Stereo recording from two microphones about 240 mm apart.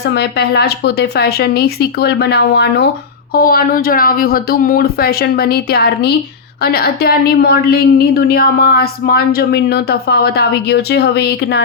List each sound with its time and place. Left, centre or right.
0.1 s a woman's voice: left